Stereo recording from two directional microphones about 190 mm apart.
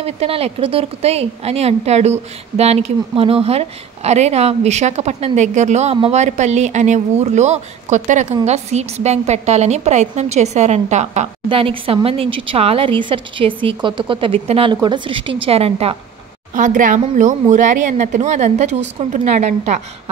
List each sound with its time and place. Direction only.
0.0 s speech: 30° right (ahead or behind)
16.5 s speech: 45° right (ahead or behind)